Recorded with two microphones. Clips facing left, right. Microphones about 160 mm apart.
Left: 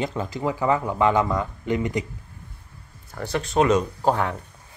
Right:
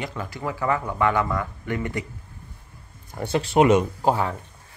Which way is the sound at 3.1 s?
20° right (ahead or behind).